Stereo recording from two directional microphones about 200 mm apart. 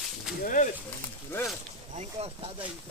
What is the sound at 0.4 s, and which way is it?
Speech, 40° left (ahead or behind).